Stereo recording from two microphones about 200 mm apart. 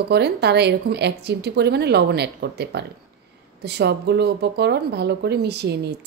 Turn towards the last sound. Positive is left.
turn(degrees=-55)  # may be behind; listen again after turning